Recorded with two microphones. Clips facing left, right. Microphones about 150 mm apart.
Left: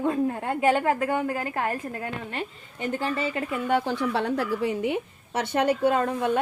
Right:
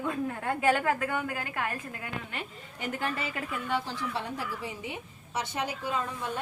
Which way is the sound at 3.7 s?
55° left (ahead or behind).